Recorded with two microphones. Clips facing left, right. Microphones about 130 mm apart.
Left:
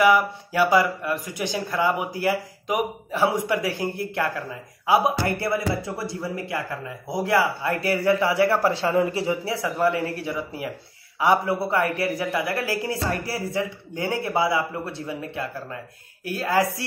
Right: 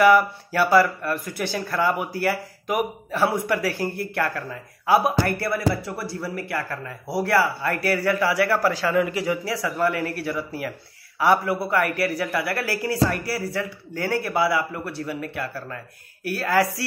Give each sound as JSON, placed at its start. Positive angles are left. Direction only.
{"t": 0.0, "sound": "speech", "side_deg": 15}